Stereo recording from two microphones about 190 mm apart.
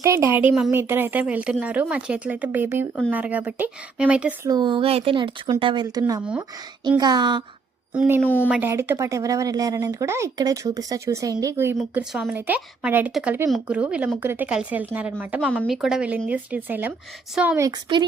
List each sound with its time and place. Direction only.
0.0 s speech: 15° right (ahead or behind)
4.4 s a woman's voice: 20° right (ahead or behind)
7.9 s a woman's voice: 10° right (ahead or behind)
17.7 s a woman's voice: 25° right (ahead or behind)